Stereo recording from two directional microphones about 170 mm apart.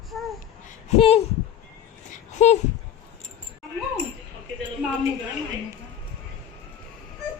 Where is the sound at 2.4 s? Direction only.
40° left (ahead or behind).